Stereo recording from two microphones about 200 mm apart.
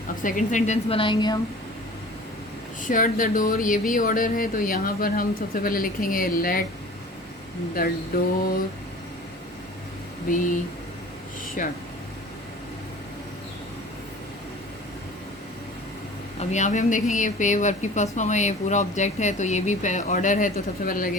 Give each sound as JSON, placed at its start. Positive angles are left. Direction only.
{"t": 0.2, "sound": "speech", "side_deg": 40}
{"t": 2.8, "sound": "speech", "side_deg": 40}
{"t": 7.8, "sound": "speech", "side_deg": 45}
{"t": 10.2, "sound": "speech", "side_deg": 40}
{"t": 11.6, "sound": "speech", "side_deg": 45}
{"t": 16.4, "sound": "speech", "side_deg": 35}